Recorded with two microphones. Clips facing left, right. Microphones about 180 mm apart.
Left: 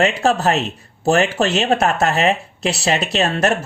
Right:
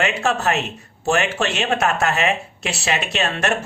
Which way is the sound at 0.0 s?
35° left (ahead or behind).